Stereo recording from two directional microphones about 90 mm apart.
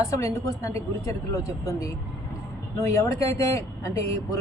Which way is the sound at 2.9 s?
35° left (ahead or behind).